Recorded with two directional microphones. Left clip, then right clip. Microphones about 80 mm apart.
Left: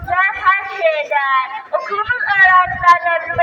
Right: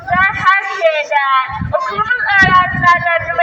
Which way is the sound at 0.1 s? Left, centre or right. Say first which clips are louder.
Right 3 dB; left.